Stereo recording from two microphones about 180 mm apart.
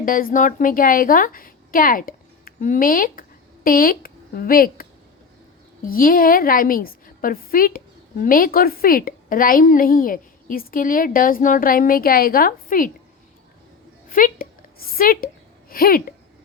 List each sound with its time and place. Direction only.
0.0 s a woman's voice: 50° left (ahead or behind)
14.1 s a sound: 50° left (ahead or behind)
15.7 s speech: 55° left (ahead or behind)